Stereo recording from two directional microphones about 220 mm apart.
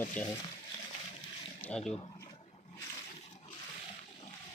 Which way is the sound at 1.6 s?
5° left (ahead or behind).